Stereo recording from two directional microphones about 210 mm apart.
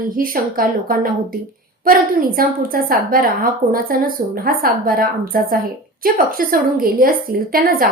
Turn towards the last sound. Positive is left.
turn(degrees=-45)  # may be behind; listen again after turning